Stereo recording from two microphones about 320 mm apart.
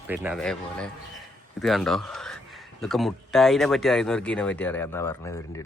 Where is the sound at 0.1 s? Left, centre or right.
Centre.